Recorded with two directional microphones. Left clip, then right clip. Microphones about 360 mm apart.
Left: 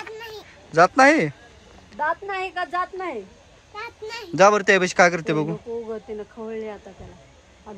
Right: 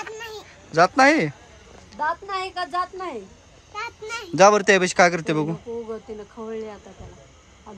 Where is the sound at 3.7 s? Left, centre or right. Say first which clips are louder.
Right 2 dB; centre.